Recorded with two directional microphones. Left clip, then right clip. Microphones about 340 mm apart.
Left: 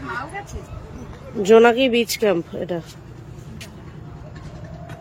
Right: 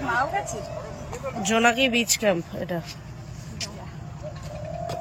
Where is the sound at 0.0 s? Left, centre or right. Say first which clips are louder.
Right 5 dB; centre.